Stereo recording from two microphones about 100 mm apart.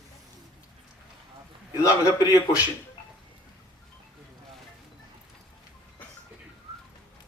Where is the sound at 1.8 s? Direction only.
35° left (ahead or behind).